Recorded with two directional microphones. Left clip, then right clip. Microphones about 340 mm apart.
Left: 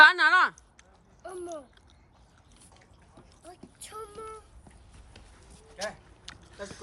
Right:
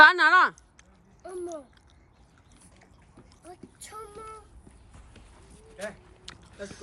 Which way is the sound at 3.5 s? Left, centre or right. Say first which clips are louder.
Right 1 dB; centre.